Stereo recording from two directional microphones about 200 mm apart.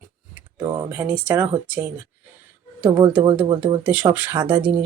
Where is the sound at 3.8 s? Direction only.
10° right (ahead or behind).